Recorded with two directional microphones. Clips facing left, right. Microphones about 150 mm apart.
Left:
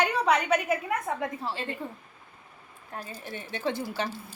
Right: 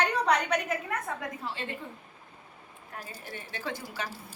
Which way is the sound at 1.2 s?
35° left (ahead or behind).